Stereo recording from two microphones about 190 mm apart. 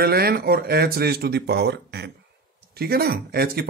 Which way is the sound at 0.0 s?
55° right (ahead or behind).